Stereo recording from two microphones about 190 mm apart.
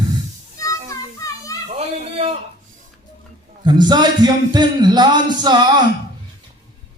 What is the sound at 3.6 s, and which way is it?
A man's voice, 25° right (ahead or behind).